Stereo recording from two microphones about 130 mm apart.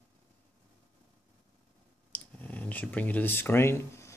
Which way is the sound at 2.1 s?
10° left (ahead or behind).